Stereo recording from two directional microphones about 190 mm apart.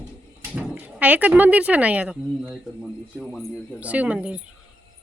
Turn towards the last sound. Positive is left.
turn(degrees=-5)  # may be behind; listen again after turning